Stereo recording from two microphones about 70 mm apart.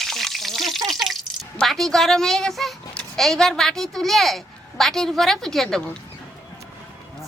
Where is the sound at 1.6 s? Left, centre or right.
Centre.